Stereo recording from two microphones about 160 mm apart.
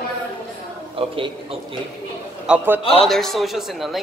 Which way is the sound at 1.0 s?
35° right (ahead or behind).